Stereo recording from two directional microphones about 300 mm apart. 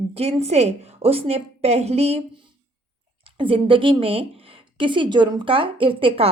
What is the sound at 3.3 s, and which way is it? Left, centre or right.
Speech, centre.